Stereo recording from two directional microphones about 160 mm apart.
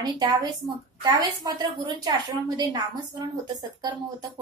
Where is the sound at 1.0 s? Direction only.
25° right (ahead or behind).